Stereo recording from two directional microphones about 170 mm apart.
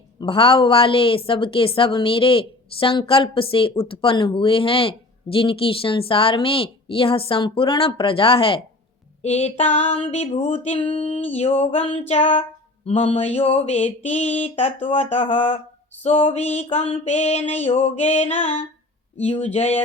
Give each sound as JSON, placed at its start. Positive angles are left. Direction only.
{"t": 0.2, "sound": "a woman's voice", "side_deg": 30}